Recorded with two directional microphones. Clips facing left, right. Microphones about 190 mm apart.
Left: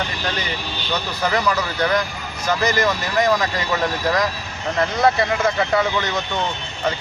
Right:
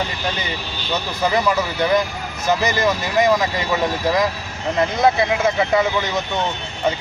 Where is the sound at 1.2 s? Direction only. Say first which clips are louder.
Right 3 dB; 20° right (ahead or behind).